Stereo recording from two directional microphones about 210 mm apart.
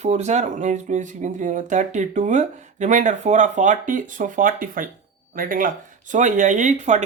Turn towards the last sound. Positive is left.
turn(degrees=-35)  # may be behind; listen again after turning